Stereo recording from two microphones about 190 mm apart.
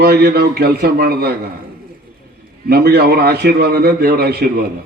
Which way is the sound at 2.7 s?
55° right (ahead or behind).